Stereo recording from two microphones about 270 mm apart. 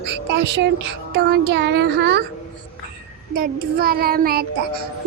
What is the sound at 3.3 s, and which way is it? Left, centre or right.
A child's voice, right.